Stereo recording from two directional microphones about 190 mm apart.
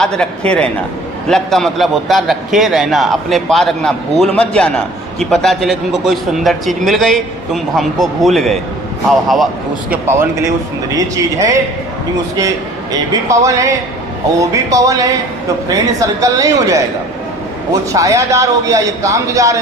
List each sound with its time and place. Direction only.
0.0 s a man's voice: 5° left (ahead or behind)
10.9 s speech: 20° right (ahead or behind)
17.9 s speech: 15° right (ahead or behind)